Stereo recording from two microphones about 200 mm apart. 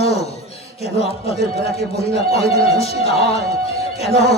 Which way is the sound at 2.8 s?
30° left (ahead or behind).